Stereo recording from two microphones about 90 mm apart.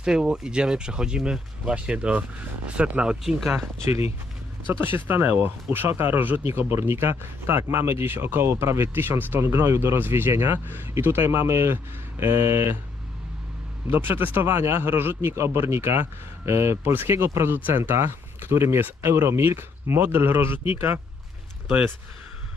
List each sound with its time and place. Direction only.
0.0 s speech: 10° right (ahead or behind)
4.7 s speech: 25° right (ahead or behind)
13.8 s speech: 25° right (ahead or behind)